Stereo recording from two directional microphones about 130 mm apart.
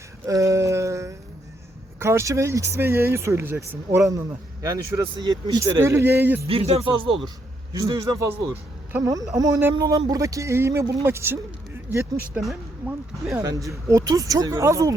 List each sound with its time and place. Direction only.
0.3 s a sound: 25° right (ahead or behind)
2.0 s speech: 20° right (ahead or behind)
6.5 s speech: 50° right (ahead or behind)
7.7 s speech: 25° right (ahead or behind)
12.4 s speech: centre (ahead or behind)
13.3 s speech: 25° right (ahead or behind)